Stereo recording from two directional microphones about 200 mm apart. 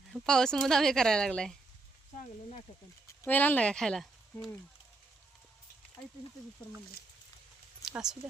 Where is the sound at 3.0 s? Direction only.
10° left (ahead or behind).